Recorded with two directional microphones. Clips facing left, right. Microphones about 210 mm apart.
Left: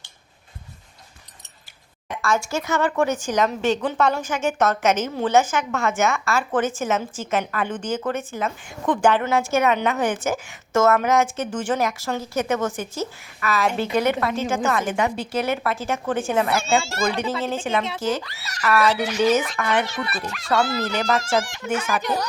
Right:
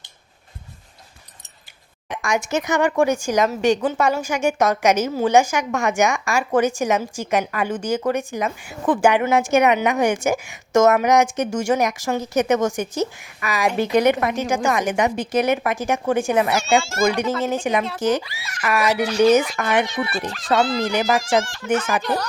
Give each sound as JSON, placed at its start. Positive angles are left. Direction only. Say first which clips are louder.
{"t": 2.0, "sound": "a woman's voice", "louder": "right 1 dB", "side_deg": -15}
{"t": 21.1, "sound": "speech", "louder": "right 2 dB", "side_deg": 0}
{"t": 21.6, "sound": "speech", "louder": "right 4 dB", "side_deg": 15}